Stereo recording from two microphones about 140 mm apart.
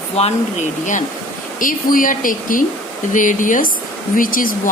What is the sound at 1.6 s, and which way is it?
Speech, 75° left (ahead or behind).